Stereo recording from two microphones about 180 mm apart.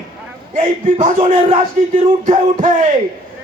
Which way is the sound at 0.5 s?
45° right (ahead or behind).